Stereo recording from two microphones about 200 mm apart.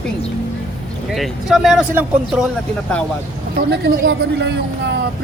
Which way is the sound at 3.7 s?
55° right (ahead or behind).